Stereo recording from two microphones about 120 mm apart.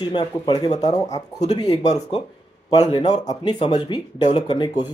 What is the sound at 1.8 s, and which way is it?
Speech, 65° left (ahead or behind).